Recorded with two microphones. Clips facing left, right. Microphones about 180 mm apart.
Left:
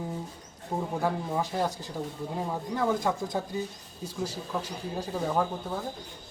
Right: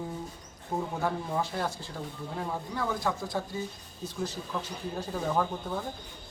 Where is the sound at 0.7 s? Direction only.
10° left (ahead or behind).